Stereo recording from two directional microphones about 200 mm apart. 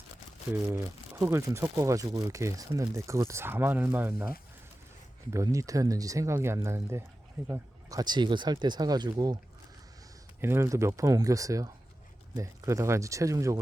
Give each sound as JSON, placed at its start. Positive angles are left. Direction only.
{"t": 0.5, "sound": "speech", "side_deg": -10}
{"t": 5.3, "sound": "speech", "side_deg": -15}
{"t": 10.4, "sound": "speech", "side_deg": -15}